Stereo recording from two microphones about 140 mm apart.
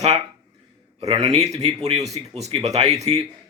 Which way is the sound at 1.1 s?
50° right (ahead or behind).